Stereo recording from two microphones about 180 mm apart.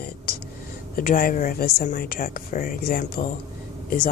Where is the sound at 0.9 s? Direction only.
50° left (ahead or behind).